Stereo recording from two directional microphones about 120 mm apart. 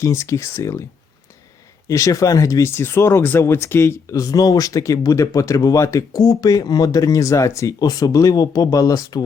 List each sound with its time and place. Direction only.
0.0 s speech: 25° left (ahead or behind)
1.9 s speech: 25° left (ahead or behind)